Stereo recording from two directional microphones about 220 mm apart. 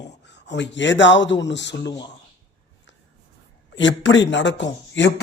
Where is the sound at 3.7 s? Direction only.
55° left (ahead or behind).